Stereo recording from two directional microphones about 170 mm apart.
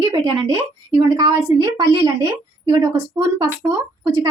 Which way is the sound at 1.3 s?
20° right (ahead or behind).